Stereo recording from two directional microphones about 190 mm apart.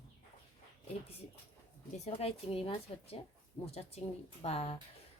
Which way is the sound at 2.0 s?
30° left (ahead or behind).